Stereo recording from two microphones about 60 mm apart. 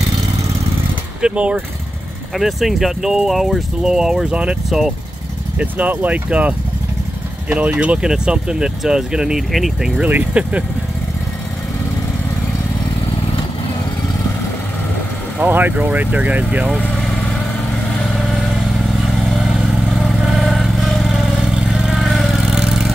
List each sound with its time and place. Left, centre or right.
1.2 s speech: centre
2.3 s speech: centre
4.6 s speech: centre
5.6 s speech: right; by 9.8 s centre
10.0 s speech: right
15.4 s speech: right
19.1 s vehicle: centre